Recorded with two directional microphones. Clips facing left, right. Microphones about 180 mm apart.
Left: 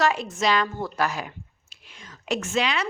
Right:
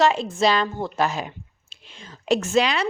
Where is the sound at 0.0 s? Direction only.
25° right (ahead or behind).